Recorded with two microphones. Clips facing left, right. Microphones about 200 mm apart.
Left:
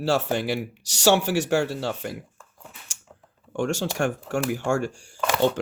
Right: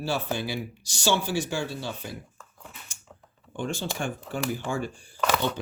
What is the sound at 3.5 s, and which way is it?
Speech, 75° left (ahead or behind).